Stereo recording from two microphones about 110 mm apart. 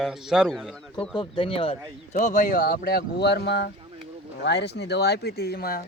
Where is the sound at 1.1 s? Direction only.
50° left (ahead or behind).